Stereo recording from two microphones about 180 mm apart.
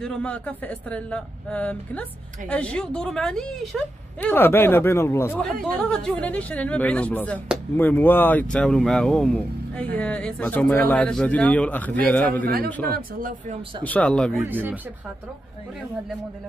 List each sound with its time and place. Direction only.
0.0 s a woman's voice: 5° left (ahead or behind)
12.9 s speech: 50° right (ahead or behind)
13.8 s speech: 5° left (ahead or behind)
14.5 s speech: 10° right (ahead or behind)